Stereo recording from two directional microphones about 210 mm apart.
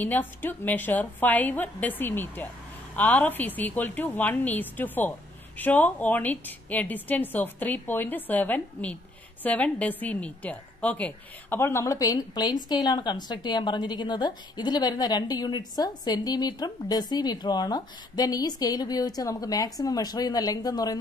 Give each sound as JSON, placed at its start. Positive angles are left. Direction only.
{"t": 0.0, "sound": "a woman's voice", "side_deg": 10}